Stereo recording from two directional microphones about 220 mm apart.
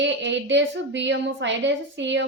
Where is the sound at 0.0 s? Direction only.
55° right (ahead or behind).